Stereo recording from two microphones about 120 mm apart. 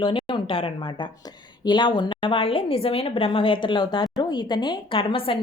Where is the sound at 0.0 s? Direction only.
40° left (ahead or behind).